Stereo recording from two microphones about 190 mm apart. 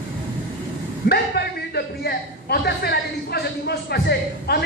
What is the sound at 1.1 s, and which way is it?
A man's voice, 55° left (ahead or behind).